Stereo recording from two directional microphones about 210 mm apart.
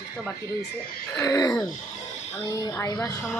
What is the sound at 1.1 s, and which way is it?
Speech, 15° left (ahead or behind).